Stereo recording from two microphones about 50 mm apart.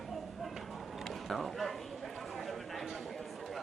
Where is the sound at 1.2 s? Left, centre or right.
Centre.